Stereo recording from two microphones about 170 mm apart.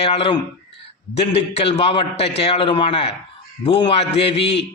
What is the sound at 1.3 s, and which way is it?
A man's voice, 35° left (ahead or behind).